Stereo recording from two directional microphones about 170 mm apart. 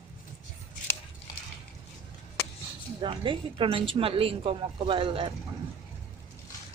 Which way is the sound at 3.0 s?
30° right (ahead or behind).